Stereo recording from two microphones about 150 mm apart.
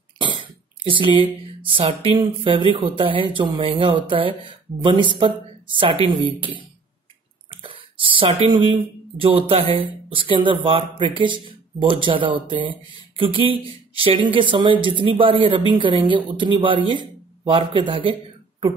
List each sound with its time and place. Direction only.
0.2 s speech: 35° right (ahead or behind)
7.6 s speech: 35° right (ahead or behind)